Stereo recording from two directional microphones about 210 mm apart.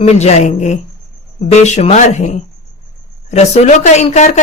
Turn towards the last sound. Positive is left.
turn(degrees=30)  # may be behind; listen again after turning